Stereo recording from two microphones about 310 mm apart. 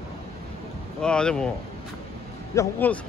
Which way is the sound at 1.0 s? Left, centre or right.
Centre.